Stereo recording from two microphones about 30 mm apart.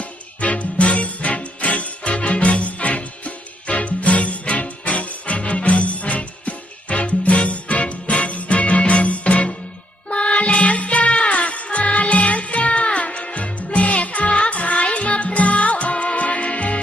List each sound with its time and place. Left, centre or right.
0.0 s music: left